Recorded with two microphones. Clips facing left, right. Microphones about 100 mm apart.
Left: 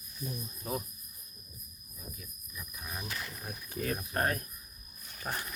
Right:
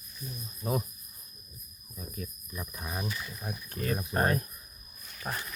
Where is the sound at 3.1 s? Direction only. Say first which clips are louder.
Right 2 dB; 55° left (ahead or behind).